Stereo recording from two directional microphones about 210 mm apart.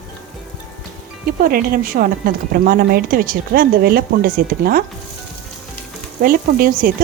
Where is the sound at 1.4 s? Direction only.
45° right (ahead or behind).